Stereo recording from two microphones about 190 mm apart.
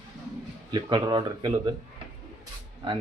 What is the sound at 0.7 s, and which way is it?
Speech, 25° right (ahead or behind).